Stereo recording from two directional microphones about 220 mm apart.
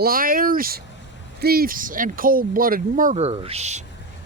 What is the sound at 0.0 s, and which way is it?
Speech, 40° right (ahead or behind).